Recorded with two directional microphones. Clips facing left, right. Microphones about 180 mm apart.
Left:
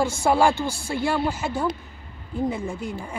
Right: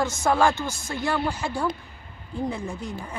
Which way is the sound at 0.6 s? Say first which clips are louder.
Left 4 dB; 30° left (ahead or behind).